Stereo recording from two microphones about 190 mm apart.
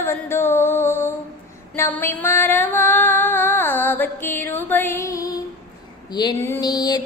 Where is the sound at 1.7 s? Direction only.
10° left (ahead or behind).